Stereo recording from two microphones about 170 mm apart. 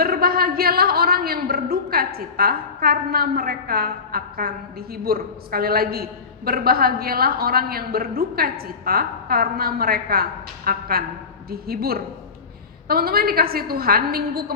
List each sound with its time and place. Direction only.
0.0 s a woman's voice: 60° right (ahead or behind)